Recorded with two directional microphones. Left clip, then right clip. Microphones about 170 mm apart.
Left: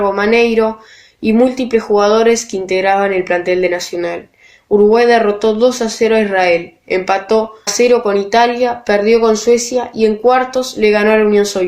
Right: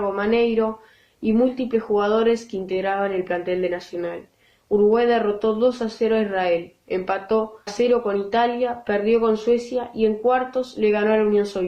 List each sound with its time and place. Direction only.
0.0 s speech: 35° left (ahead or behind)